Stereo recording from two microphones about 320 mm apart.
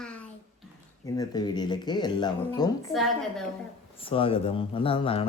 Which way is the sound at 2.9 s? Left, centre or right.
Centre.